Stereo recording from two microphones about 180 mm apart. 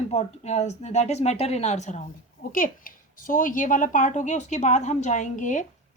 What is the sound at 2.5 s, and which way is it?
Speech, 50° left (ahead or behind).